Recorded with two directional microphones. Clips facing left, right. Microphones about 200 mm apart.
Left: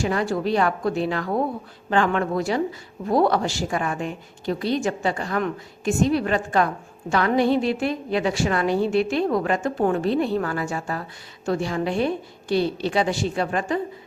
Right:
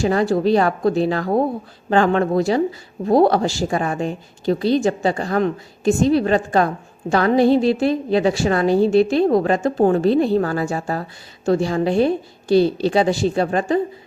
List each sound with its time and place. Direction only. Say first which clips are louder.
0.0 s a woman's voice: right 6 dB; 35° right (ahead or behind)